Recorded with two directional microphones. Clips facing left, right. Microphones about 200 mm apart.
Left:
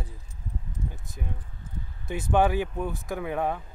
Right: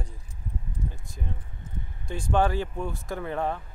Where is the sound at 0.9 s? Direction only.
20° left (ahead or behind).